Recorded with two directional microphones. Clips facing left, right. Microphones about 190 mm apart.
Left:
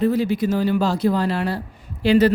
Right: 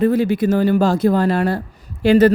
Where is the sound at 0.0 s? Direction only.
55° right (ahead or behind).